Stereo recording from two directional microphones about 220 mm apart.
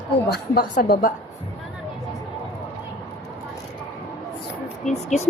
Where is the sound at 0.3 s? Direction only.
45° left (ahead or behind).